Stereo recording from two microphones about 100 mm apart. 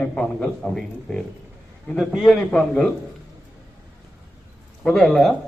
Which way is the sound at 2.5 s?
10° left (ahead or behind).